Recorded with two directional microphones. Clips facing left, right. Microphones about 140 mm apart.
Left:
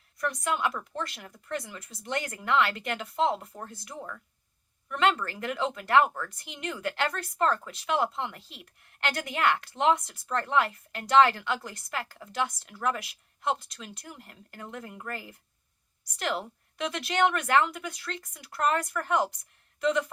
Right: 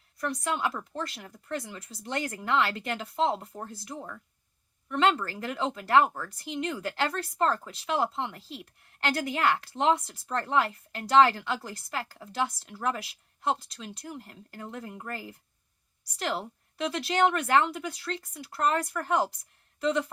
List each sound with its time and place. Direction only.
0.2 s speech: 30° right (ahead or behind)